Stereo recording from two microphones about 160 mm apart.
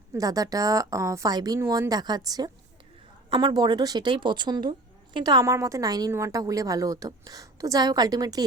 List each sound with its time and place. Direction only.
0.1 s a woman's voice: 20° right (ahead or behind)